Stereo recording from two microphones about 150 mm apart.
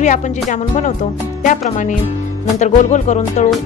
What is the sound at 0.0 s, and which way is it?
Speech, 55° left (ahead or behind).